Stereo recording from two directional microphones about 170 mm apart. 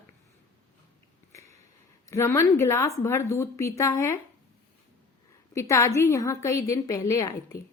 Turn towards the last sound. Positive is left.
turn(degrees=20)  # may be behind; listen again after turning